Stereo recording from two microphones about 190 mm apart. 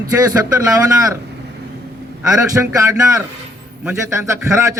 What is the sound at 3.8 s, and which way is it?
Speech, 15° right (ahead or behind).